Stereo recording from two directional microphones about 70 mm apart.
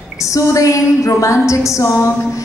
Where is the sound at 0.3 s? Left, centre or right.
Left.